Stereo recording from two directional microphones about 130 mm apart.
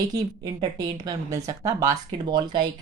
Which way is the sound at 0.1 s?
30° right (ahead or behind).